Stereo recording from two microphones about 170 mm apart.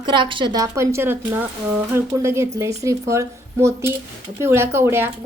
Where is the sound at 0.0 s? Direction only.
25° right (ahead or behind).